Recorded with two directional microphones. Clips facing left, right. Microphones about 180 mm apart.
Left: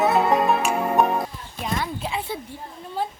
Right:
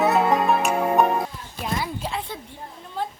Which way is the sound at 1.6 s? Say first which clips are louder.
Even; centre (ahead or behind).